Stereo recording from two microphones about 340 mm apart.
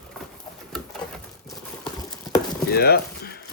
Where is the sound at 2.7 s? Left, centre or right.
Left.